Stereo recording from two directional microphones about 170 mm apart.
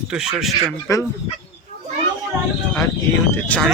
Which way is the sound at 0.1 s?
5° right (ahead or behind).